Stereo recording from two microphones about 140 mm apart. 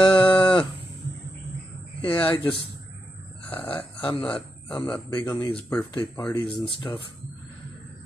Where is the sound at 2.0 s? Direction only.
40° left (ahead or behind).